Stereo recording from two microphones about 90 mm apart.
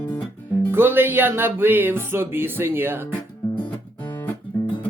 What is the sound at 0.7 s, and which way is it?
Music, 25° right (ahead or behind).